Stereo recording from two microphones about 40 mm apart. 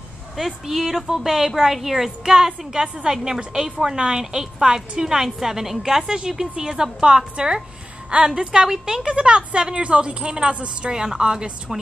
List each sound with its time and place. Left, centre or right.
0.7 s a woman's voice: centre